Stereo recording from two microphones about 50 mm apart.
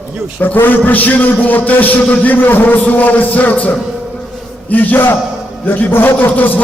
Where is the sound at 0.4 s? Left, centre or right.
Left.